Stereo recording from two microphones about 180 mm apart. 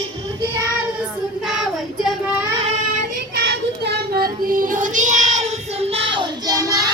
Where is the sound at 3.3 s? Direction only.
65° right (ahead or behind); by 6.9 s 20° right (ahead or behind).